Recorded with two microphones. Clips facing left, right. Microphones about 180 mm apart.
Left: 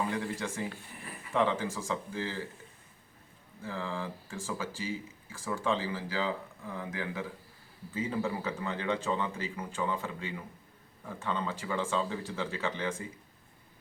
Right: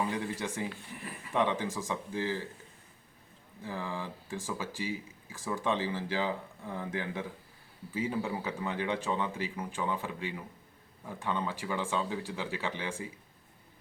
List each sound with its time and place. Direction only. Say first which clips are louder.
0.1 s speech: even; 15° right (ahead or behind)
3.6 s speech: left 1 dB; 15° right (ahead or behind)
7.9 s speech: even; 15° right (ahead or behind)